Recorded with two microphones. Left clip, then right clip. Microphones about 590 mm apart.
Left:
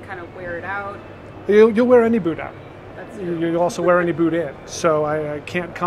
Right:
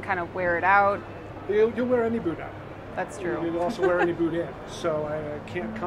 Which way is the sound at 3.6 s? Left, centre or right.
Left.